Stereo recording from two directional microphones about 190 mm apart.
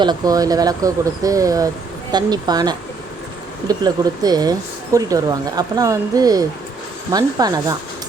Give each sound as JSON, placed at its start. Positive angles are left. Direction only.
{"t": 0.0, "sound": "speech", "side_deg": -20}